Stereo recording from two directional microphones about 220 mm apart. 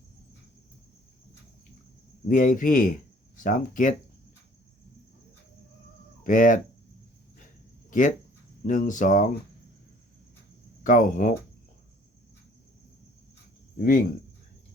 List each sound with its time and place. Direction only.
2.2 s a man's voice: 35° left (ahead or behind)
6.2 s a man's voice: 35° left (ahead or behind)
7.9 s a man's voice: 35° left (ahead or behind)
10.8 s a man's voice: 35° left (ahead or behind)
13.7 s speech: 40° left (ahead or behind)